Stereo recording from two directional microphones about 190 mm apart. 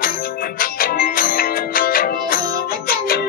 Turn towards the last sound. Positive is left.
turn(degrees=50)  # may be behind; listen again after turning